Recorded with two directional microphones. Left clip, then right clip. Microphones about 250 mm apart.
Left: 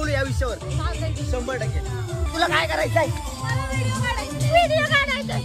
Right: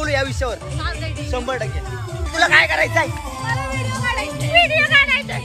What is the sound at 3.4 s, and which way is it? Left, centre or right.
Music, centre.